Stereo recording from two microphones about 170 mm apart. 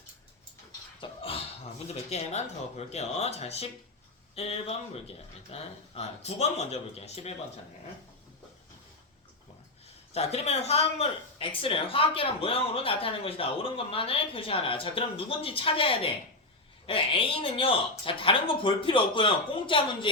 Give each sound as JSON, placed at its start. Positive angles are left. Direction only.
{"t": 1.0, "sound": "dog", "side_deg": 35}
{"t": 1.9, "sound": "speech", "side_deg": 40}
{"t": 10.2, "sound": "speech", "side_deg": 40}